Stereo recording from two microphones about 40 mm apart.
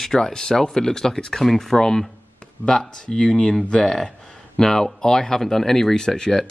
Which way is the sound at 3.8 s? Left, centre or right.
Centre.